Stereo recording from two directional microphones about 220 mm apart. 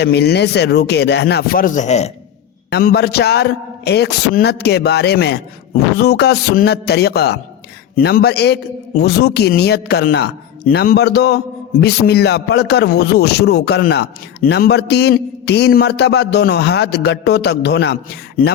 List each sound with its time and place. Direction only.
0.0 s speech: 50° left (ahead or behind); by 2.1 s 30° left (ahead or behind)
2.6 s speech: 45° left (ahead or behind)